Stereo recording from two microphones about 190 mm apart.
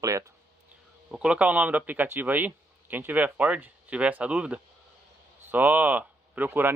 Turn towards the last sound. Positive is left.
turn(degrees=-10)  # may be behind; listen again after turning